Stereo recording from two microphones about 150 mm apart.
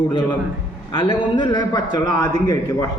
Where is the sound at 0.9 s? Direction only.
30° left (ahead or behind).